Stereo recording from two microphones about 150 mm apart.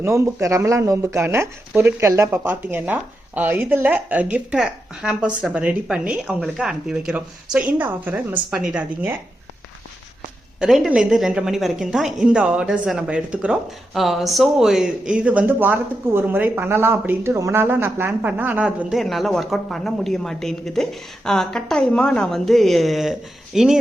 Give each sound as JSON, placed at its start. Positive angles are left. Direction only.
{"t": 0.0, "sound": "speech", "side_deg": -20}
{"t": 10.6, "sound": "speech", "side_deg": -5}